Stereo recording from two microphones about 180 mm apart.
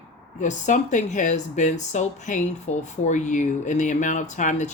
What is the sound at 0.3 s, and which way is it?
Speech, 40° left (ahead or behind).